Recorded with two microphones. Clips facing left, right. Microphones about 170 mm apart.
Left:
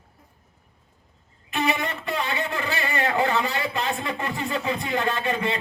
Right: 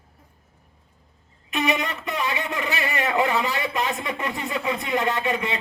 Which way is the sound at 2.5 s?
20° right (ahead or behind).